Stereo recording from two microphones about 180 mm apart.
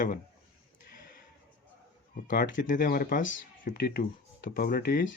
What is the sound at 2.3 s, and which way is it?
Speech, 50° left (ahead or behind).